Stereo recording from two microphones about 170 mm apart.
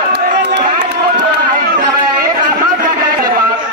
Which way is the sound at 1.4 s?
55° right (ahead or behind).